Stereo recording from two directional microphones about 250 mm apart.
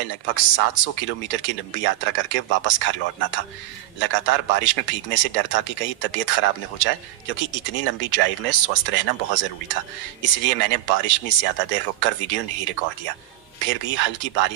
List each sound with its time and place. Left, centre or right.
0.0 s speech: left